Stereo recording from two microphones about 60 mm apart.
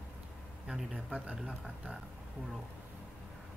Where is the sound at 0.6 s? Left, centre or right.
Centre.